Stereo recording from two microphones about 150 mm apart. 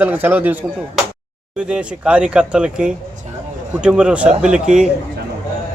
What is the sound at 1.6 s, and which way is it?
A man's voice, 5° right (ahead or behind).